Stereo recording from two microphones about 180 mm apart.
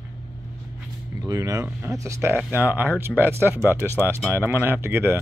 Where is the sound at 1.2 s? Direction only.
20° right (ahead or behind).